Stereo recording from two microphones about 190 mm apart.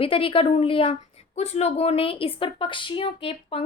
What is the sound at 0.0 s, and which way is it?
A woman's voice, 30° left (ahead or behind).